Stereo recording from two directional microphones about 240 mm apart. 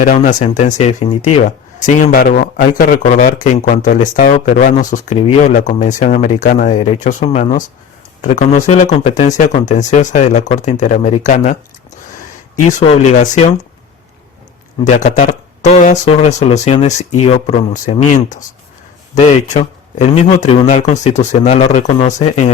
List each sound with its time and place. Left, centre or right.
0.0 s a man's voice: left
14.8 s a man's voice: left